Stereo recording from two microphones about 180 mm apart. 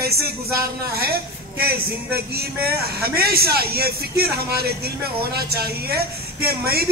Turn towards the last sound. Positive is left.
turn(degrees=-60)  # may be behind; listen again after turning